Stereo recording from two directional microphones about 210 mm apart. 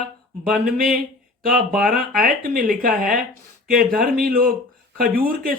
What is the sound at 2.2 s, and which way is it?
Speech, 40° right (ahead or behind).